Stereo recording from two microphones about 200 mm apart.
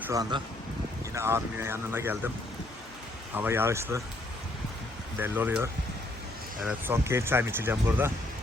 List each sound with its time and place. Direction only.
0.0 s speech: 15° right (ahead or behind)
3.3 s speech: 10° right (ahead or behind)
5.2 s speech: 10° right (ahead or behind)